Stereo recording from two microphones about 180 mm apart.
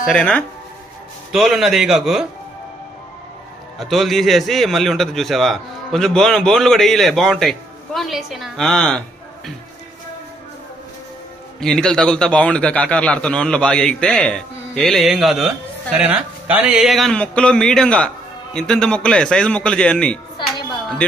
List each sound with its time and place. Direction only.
0.1 s a man's voice: 5° left (ahead or behind)
3.8 s a man's voice: centre (ahead or behind)
11.6 s a man's voice: 5° left (ahead or behind)